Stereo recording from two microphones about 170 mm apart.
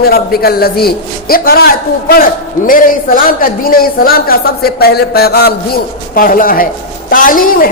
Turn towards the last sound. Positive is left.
turn(degrees=55)  # may be behind; listen again after turning